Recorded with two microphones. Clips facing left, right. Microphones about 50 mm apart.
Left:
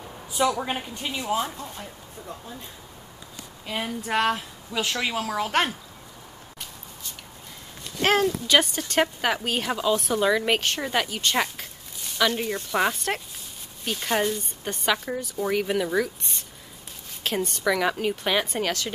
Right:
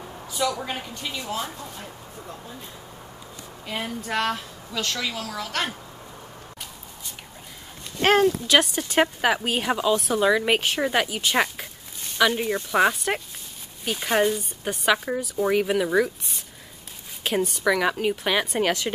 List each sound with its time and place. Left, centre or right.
0.4 s speech: left
3.6 s a woman's voice: centre
4.0 s speech: centre
8.0 s a woman's voice: centre
18.6 s speech: centre